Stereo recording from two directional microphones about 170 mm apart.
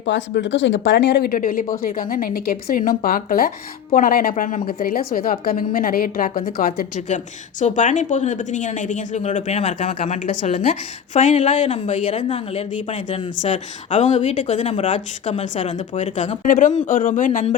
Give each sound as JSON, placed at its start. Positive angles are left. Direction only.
{"t": 0.0, "sound": "a woman's voice", "side_deg": 90}